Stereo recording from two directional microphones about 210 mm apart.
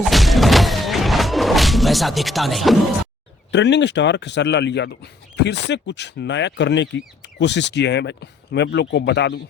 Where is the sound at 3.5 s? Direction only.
55° left (ahead or behind).